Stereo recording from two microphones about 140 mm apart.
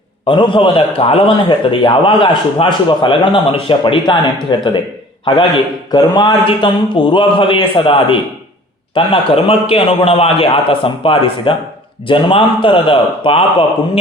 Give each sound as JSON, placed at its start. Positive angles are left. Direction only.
{"t": 0.3, "sound": "a man's voice", "side_deg": 35}
{"t": 5.9, "sound": "a man's voice", "side_deg": 30}